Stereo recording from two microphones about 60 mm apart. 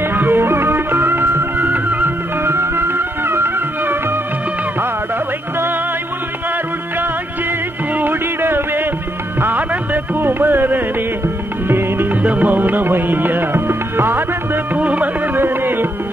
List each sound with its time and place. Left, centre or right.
0.1 s music: right
7.9 s a sound: right
9.4 s music: right
14.8 s music: right
15.3 s music: right